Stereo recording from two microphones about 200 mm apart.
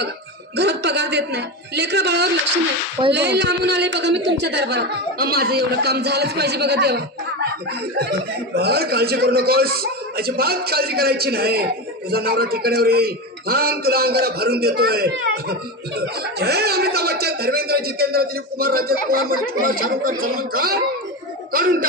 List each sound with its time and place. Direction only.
0.6 s speech: 60° right (ahead or behind)
8.0 s speech: 55° right (ahead or behind)